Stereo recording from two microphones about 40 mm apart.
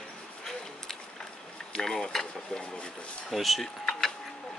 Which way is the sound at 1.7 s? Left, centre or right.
Centre.